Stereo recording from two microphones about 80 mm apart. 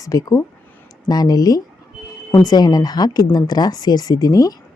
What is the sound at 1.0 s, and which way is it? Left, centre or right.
A woman's voice, left.